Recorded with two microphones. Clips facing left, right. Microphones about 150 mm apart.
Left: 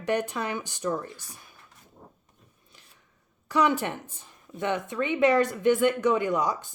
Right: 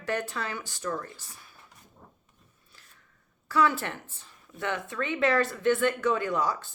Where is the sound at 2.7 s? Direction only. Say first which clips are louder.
Even; 15° left (ahead or behind).